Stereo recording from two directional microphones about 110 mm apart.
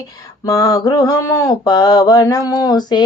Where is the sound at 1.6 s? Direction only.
35° left (ahead or behind).